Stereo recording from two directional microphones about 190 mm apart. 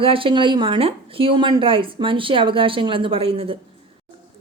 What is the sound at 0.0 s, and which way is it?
Speech, 30° right (ahead or behind).